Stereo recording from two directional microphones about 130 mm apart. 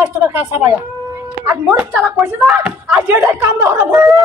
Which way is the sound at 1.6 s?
5° right (ahead or behind).